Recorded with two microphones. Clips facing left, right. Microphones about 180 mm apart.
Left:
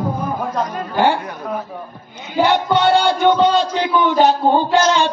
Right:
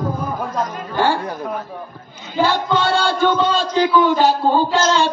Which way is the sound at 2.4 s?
20° left (ahead or behind).